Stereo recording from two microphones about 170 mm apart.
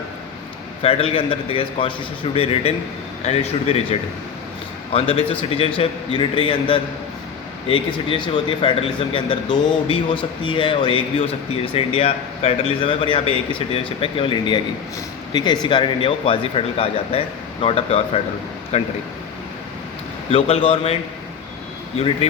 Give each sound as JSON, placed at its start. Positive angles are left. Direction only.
{"t": 0.8, "sound": "speech", "side_deg": 35}
{"t": 20.3, "sound": "speech", "side_deg": 35}